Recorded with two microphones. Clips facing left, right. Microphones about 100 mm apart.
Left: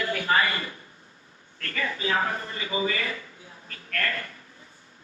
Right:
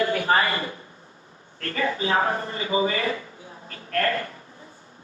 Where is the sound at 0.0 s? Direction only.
30° right (ahead or behind).